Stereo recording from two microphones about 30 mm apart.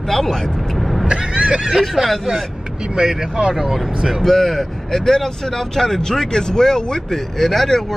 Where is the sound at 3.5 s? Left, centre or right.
Centre.